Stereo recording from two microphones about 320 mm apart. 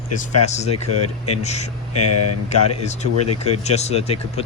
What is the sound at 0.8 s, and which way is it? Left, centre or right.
Speech, left.